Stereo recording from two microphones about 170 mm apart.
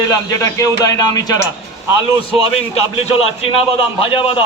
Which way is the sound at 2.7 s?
35° left (ahead or behind).